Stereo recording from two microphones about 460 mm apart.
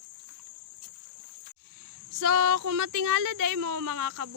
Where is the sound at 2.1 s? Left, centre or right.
Right.